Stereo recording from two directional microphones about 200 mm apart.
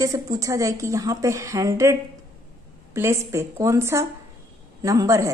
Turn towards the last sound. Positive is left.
turn(degrees=-15)  # may be behind; listen again after turning